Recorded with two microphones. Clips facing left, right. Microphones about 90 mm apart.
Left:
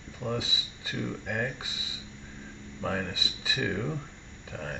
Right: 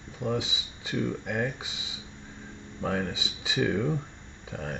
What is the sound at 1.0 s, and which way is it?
Speech, 5° right (ahead or behind).